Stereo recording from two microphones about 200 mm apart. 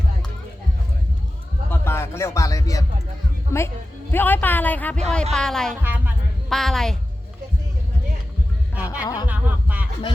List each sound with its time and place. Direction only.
1.7 s music: 10° left (ahead or behind)
3.5 s speech: 15° left (ahead or behind)
8.7 s music: 5° right (ahead or behind)
9.0 s speech: 20° left (ahead or behind)
9.2 s speech: 5° right (ahead or behind)